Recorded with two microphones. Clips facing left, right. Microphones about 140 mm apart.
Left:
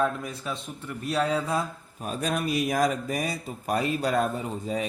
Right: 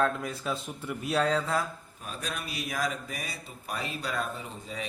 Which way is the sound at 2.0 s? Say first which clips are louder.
Left 10 dB; 45° left (ahead or behind).